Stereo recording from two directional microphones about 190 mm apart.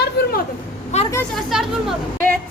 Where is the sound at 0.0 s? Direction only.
55° left (ahead or behind).